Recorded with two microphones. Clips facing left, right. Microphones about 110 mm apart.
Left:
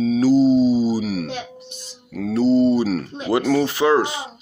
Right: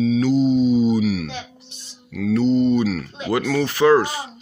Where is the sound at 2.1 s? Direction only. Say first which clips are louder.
Left 1 dB; 35° left (ahead or behind).